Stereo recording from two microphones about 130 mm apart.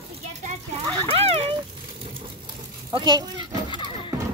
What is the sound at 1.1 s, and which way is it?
Speech, 50° right (ahead or behind).